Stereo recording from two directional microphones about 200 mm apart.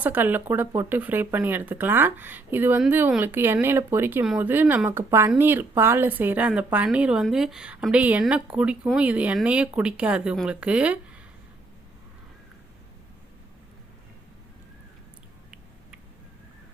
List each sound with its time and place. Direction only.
0.0 s speech: 10° right (ahead or behind)